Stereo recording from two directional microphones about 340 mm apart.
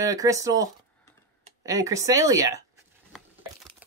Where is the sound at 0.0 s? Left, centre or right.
Centre.